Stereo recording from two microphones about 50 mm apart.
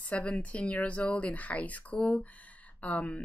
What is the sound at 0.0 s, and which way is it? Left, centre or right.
Speech, left.